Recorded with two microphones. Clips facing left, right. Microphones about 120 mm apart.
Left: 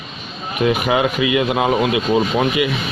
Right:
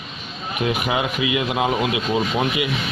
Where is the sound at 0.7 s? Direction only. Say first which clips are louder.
Left 6 dB; 55° left (ahead or behind).